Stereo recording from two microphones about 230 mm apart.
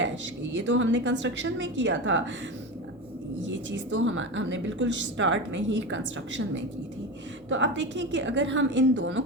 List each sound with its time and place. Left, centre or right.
0.5 s a woman's voice: right
3.9 s a woman's voice: right
7.5 s a woman's voice: right